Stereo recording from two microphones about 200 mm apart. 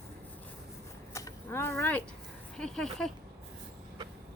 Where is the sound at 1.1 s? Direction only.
15° left (ahead or behind).